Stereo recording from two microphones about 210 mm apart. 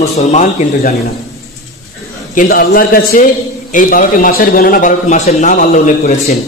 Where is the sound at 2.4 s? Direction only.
40° left (ahead or behind).